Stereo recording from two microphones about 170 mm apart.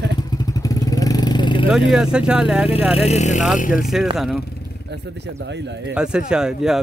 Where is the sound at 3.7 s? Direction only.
5° right (ahead or behind).